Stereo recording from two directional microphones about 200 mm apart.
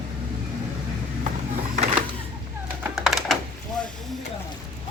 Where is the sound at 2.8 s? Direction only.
Centre (ahead or behind).